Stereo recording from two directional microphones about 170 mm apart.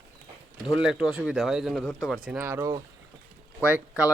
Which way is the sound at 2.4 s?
15° right (ahead or behind).